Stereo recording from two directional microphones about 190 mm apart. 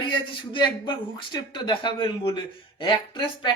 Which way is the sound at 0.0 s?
25° left (ahead or behind).